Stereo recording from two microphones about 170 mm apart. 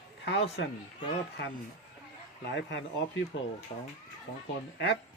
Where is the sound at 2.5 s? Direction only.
90° left.